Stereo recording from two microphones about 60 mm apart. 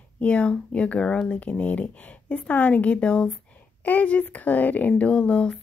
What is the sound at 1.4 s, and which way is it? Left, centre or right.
Speech, left.